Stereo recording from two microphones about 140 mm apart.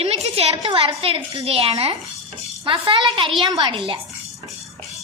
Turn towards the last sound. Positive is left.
turn(degrees=-40)  # may be behind; listen again after turning